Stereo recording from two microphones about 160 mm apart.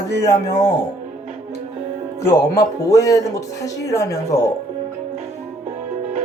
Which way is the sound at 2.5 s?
20° left (ahead or behind).